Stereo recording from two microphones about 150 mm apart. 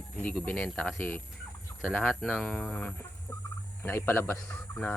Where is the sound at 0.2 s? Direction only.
10° left (ahead or behind).